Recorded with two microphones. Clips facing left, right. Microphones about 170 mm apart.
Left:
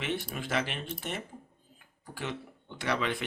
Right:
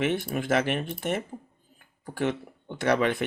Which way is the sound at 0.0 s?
50° right (ahead or behind).